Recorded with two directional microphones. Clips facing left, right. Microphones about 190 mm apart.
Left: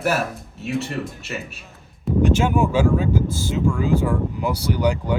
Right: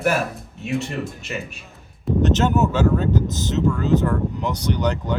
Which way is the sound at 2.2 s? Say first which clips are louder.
Even; 10° left (ahead or behind).